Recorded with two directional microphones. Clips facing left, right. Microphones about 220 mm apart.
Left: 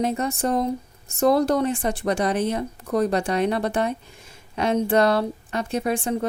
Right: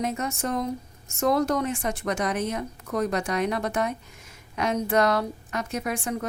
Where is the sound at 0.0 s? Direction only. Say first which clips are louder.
Left 5 dB; 30° left (ahead or behind).